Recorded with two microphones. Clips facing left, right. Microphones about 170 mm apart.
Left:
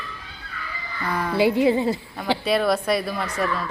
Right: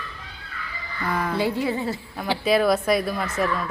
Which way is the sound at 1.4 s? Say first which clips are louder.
Left 9 dB; 15° left (ahead or behind).